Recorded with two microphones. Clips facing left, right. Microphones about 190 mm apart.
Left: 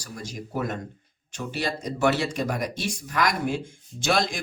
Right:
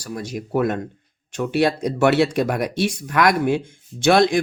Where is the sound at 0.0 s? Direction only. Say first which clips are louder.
Right 8 dB; 65° right (ahead or behind).